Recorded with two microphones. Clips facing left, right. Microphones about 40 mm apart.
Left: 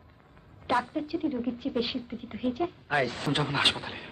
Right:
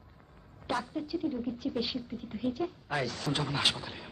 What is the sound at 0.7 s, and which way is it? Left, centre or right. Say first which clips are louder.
A woman's voice: left 6 dB; left.